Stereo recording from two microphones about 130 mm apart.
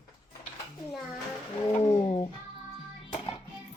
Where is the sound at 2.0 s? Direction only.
35° left (ahead or behind).